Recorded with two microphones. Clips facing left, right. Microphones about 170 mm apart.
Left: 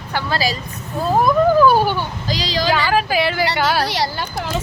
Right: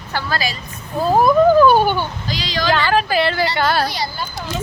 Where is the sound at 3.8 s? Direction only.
85° left.